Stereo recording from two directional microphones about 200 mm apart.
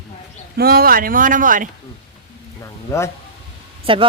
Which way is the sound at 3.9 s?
25° right (ahead or behind).